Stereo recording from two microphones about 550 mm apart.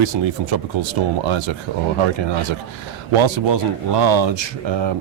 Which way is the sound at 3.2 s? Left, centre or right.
Right.